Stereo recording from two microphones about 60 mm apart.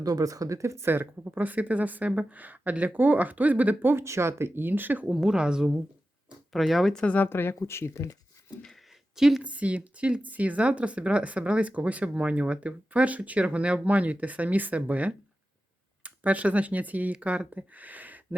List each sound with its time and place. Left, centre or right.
0.0 s speech: right
0.9 s speech: right
4.0 s speech: right
5.1 s a woman's voice: centre
7.0 s speech: left
7.3 s speech: left
9.1 s a woman's voice: centre
9.4 s speech: right